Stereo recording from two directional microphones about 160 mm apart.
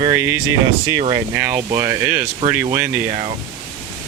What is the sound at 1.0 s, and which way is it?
Speech, 35° right (ahead or behind).